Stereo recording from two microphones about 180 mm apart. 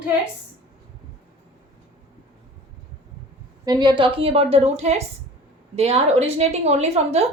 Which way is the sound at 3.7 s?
25° right (ahead or behind).